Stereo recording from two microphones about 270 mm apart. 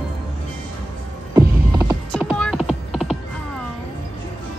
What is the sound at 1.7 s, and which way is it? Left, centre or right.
Clip-clop, centre.